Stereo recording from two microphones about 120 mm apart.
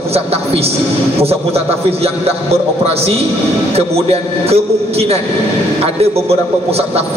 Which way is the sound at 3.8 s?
60° right (ahead or behind).